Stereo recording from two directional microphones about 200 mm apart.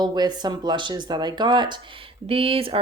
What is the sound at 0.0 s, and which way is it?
Speech, 20° right (ahead or behind).